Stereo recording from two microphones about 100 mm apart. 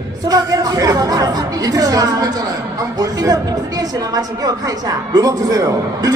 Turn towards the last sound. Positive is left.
turn(degrees=-40)  # may be behind; listen again after turning